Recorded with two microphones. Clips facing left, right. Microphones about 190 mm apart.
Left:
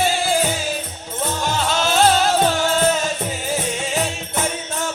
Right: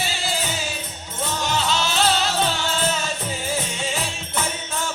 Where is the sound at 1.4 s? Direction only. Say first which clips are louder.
Left 2 dB; 50° left (ahead or behind).